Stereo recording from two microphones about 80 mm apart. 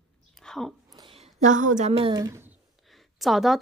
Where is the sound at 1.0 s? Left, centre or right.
Right.